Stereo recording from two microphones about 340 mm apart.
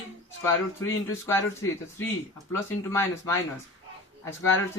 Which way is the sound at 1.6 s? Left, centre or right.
Left.